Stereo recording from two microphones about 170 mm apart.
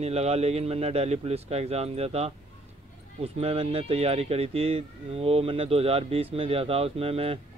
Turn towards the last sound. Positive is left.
turn(degrees=-35)  # may be behind; listen again after turning